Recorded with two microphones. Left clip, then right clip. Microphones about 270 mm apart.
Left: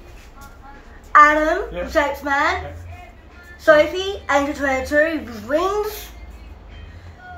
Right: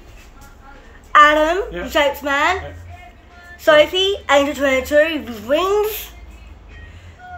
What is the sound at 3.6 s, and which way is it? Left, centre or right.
A woman's voice, right.